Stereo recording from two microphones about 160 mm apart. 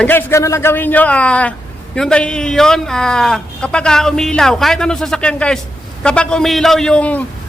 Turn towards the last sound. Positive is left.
turn(degrees=10)  # may be behind; listen again after turning